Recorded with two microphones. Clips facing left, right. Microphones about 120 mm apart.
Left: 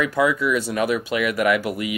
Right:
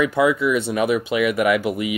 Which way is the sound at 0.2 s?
5° right (ahead or behind).